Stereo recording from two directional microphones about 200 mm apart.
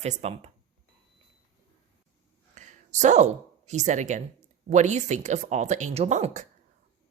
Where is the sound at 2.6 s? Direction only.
35° right (ahead or behind).